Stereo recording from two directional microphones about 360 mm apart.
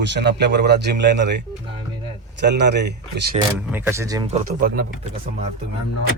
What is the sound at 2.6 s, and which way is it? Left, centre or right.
Speech, right.